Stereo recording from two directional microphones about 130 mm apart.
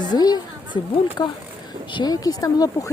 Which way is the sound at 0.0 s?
35° left (ahead or behind).